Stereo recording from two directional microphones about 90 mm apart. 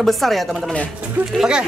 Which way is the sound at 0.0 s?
Centre (ahead or behind).